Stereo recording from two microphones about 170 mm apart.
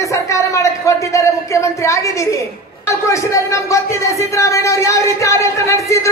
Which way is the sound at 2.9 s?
15° left (ahead or behind).